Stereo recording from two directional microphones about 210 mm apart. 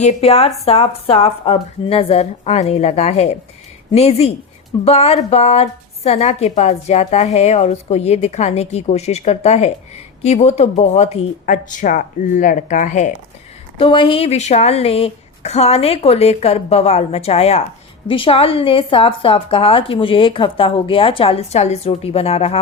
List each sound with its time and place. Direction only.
0.0 s a woman's voice: 30° left (ahead or behind)
13.7 s a woman's voice: 25° left (ahead or behind)